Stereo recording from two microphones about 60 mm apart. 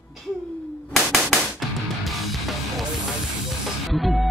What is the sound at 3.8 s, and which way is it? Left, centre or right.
Music, centre.